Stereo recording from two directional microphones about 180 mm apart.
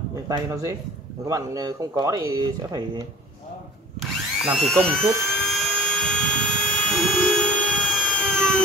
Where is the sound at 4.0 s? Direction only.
Centre (ahead or behind).